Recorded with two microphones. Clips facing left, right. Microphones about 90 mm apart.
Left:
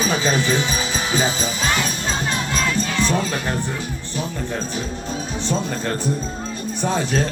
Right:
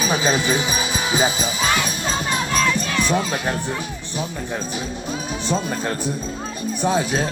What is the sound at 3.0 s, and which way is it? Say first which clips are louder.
Speech: even; 15° right (ahead or behind).